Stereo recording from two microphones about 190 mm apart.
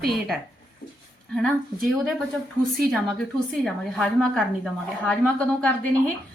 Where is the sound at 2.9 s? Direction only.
5° left (ahead or behind).